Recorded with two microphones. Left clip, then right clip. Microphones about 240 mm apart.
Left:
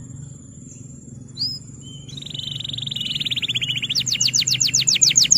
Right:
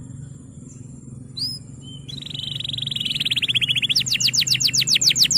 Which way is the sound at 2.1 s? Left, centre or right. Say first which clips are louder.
Even; centre.